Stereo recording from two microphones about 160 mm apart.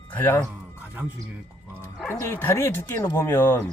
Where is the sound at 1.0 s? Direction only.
10° right (ahead or behind).